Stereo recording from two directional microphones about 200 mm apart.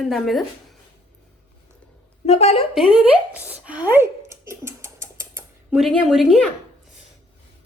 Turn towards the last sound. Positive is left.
turn(degrees=0)  # may be behind; listen again after turning